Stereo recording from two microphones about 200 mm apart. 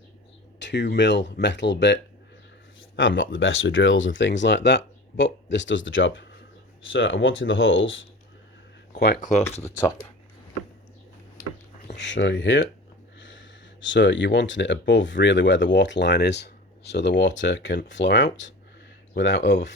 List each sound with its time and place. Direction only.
0.6 s speech: 60° left (ahead or behind)
11.8 s speech: 60° left (ahead or behind)